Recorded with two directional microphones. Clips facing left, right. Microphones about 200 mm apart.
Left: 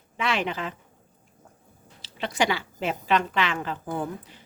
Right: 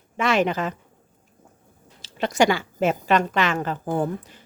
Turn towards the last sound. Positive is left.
turn(degrees=-45)  # may be behind; listen again after turning